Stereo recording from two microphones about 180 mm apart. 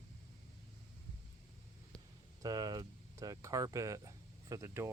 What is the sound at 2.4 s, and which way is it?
Speech, 20° right (ahead or behind).